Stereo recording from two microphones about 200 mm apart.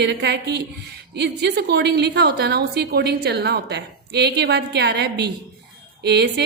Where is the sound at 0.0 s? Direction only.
55° right (ahead or behind).